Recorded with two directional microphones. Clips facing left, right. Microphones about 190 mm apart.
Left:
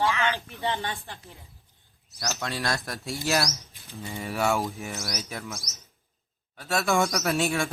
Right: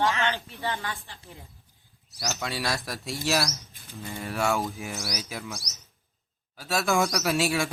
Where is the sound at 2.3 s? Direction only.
Centre (ahead or behind).